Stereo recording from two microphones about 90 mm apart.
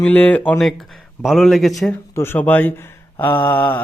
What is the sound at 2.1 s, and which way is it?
Speech, 25° left (ahead or behind).